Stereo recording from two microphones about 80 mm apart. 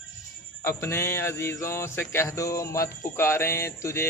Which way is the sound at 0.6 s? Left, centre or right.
Left.